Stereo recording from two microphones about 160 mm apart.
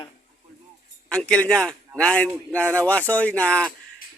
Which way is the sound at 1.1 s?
5° left (ahead or behind).